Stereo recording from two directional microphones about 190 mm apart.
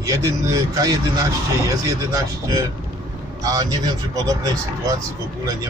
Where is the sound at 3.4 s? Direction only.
20° right (ahead or behind).